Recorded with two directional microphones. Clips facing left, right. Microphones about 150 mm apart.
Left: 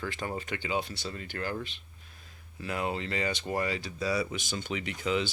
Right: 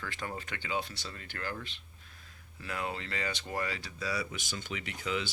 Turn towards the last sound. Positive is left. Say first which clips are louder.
# left 5 dB
turn(degrees=25)  # may be behind; listen again after turning